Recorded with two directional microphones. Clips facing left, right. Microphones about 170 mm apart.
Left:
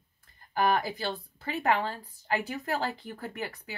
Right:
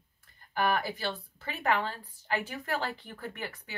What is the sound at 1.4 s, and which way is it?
Speech, 35° left (ahead or behind).